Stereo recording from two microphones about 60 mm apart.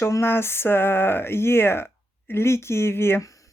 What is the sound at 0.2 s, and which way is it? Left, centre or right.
Speech, left.